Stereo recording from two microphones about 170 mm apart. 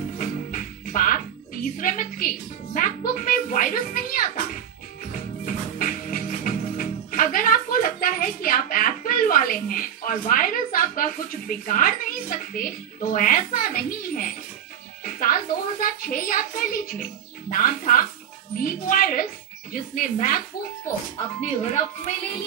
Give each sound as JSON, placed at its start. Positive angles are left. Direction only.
{"t": 0.2, "sound": "music", "side_deg": 50}
{"t": 3.1, "sound": "speech", "side_deg": 55}
{"t": 5.4, "sound": "music", "side_deg": 50}
{"t": 15.0, "sound": "a woman's voice", "side_deg": 55}